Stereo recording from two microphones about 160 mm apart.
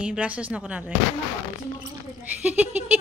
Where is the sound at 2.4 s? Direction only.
10° right (ahead or behind).